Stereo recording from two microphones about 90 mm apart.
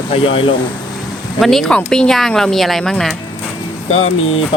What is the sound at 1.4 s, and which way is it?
Speech, 5° left (ahead or behind).